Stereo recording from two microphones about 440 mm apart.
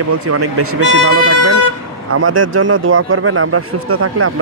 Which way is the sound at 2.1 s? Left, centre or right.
Right.